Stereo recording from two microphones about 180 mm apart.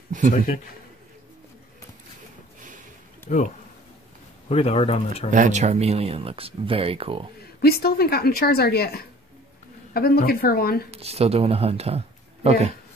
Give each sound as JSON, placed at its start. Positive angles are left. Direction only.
{"t": 3.3, "sound": "speech", "side_deg": 45}
{"t": 4.5, "sound": "speech", "side_deg": 35}
{"t": 5.3, "sound": "speech", "side_deg": -45}
{"t": 7.6, "sound": "a woman's voice", "side_deg": 60}
{"t": 10.9, "sound": "speech", "side_deg": -35}